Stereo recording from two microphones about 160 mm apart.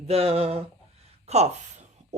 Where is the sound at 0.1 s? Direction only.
40° right (ahead or behind).